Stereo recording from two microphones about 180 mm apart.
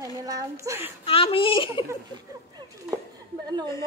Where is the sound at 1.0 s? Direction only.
30° left (ahead or behind).